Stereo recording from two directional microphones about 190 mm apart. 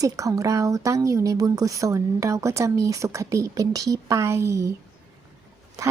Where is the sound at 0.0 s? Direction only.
20° right (ahead or behind).